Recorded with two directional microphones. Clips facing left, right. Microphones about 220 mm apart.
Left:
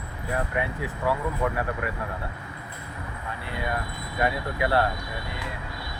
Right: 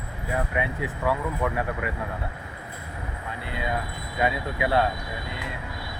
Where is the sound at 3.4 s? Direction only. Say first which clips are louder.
Right 1 dB; 20° right (ahead or behind).